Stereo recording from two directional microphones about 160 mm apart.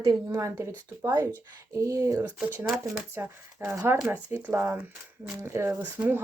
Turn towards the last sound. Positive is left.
turn(degrees=-10)  # may be behind; listen again after turning